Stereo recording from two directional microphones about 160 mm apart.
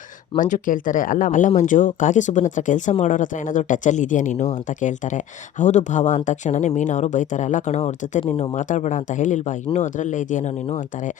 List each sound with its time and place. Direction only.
0.3 s speech: 55° left (ahead or behind)